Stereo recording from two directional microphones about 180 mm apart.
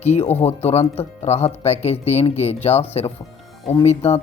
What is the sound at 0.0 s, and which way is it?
Speech, 35° left (ahead or behind).